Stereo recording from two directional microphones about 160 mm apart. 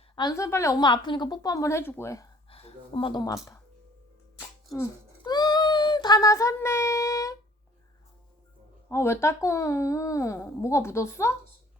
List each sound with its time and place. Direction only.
0.2 s speech: 20° left (ahead or behind)
2.5 s speech: 35° left (ahead or behind); by 3.6 s 20° left (ahead or behind)
5.2 s a sound: 25° left (ahead or behind)
8.9 s speech: 15° left (ahead or behind)